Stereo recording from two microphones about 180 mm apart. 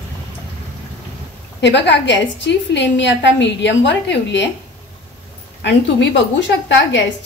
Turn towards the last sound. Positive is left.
turn(degrees=85)